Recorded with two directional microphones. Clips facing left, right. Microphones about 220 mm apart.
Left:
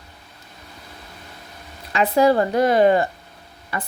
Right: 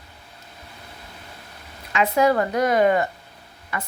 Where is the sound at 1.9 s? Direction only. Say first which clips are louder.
Left 3 dB; 35° left (ahead or behind).